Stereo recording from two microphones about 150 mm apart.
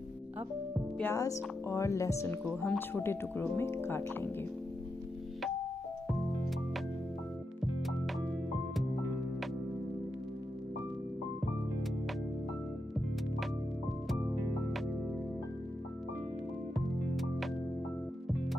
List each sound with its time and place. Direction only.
0.9 s speech: 15° left (ahead or behind)
17.1 s music: centre (ahead or behind)